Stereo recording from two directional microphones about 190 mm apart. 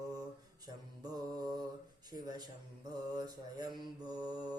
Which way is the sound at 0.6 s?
20° right (ahead or behind).